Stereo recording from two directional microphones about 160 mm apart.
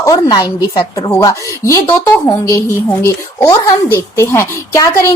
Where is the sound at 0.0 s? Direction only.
25° left (ahead or behind).